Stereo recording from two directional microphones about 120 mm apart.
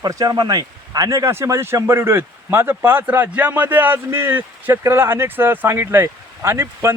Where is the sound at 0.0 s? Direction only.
30° right (ahead or behind).